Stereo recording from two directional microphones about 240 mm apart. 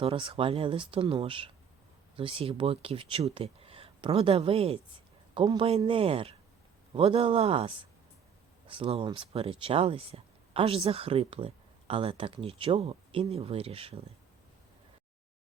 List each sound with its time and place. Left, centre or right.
0.0 s speech: right